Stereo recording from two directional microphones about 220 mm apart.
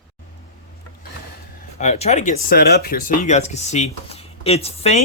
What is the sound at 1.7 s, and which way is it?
Speech, 30° left (ahead or behind).